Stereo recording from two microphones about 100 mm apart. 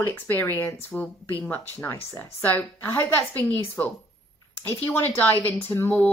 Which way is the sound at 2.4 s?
20° left (ahead or behind).